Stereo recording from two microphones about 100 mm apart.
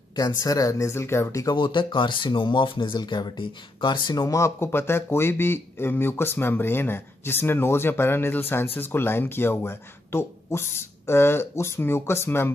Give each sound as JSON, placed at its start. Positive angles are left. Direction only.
{"t": 0.1, "sound": "speech", "side_deg": 40}
{"t": 1.6, "sound": "speech", "side_deg": 55}